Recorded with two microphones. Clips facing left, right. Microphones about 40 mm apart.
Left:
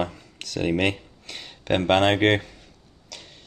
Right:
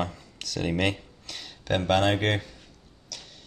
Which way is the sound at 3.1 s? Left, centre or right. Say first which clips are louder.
Left 1 dB; left.